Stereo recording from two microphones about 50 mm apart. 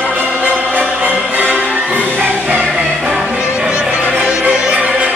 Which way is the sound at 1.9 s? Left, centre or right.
Right.